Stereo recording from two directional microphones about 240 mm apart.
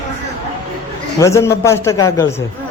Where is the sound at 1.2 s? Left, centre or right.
Centre.